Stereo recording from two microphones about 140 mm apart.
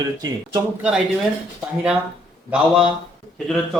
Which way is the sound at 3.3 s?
Centre (ahead or behind).